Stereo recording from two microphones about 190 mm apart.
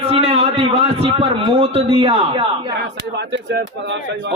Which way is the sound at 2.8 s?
60° right (ahead or behind).